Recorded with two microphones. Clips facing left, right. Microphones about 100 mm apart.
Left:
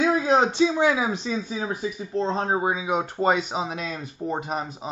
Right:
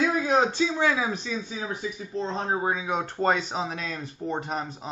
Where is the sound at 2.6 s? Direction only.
10° left (ahead or behind).